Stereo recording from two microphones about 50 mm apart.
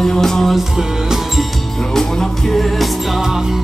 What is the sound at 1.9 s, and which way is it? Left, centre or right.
Music, centre.